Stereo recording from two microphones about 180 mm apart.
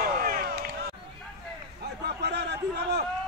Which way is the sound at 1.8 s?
65° right (ahead or behind).